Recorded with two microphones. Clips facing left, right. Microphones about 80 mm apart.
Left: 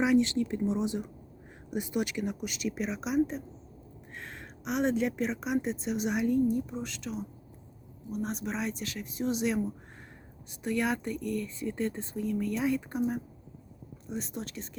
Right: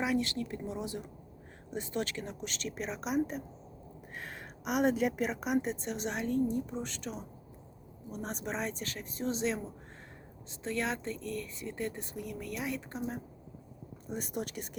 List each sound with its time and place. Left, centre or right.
0.0 s a woman's voice: left
12.1 s speech: centre
12.5 s speech: left
14.1 s a woman's voice: centre